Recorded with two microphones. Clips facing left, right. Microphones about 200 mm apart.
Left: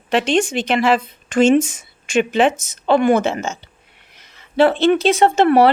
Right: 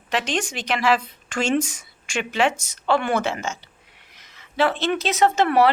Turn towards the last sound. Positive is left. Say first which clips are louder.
# left 5 dB
turn(degrees=30)  # may be behind; listen again after turning